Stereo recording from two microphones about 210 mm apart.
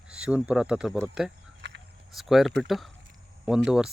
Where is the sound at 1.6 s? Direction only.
60° right (ahead or behind).